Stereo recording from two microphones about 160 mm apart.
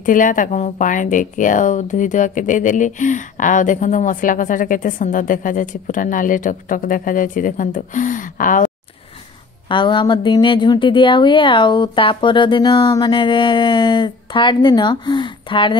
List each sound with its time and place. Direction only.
0.0 s speech: 55° left (ahead or behind)
9.7 s a woman's voice: 30° left (ahead or behind)